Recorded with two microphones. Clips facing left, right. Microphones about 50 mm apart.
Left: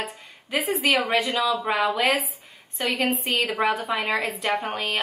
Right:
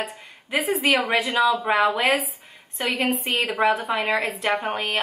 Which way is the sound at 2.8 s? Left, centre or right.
Centre.